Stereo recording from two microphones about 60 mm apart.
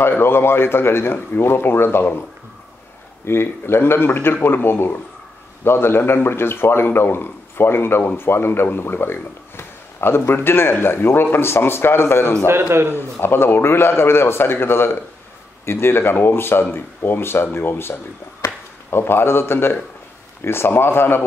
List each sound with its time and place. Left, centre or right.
0.0 s a man's voice: left
3.3 s a man's voice: left